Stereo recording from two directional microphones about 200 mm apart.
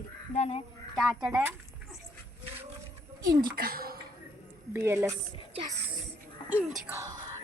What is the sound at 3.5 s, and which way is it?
Speech, 50° right (ahead or behind).